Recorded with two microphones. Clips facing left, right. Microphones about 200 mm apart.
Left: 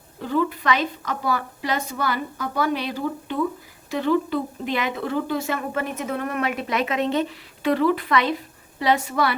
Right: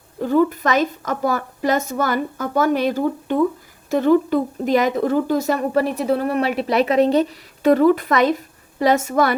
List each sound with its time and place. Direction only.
0.2 s a woman's voice: 45° right (ahead or behind)